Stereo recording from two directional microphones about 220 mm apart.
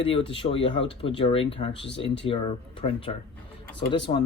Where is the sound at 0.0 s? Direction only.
25° left (ahead or behind).